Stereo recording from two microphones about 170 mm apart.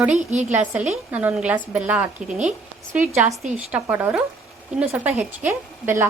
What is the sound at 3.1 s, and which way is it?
Speech, 15° right (ahead or behind).